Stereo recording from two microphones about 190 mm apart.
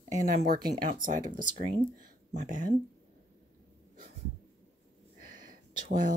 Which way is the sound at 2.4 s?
45° right (ahead or behind).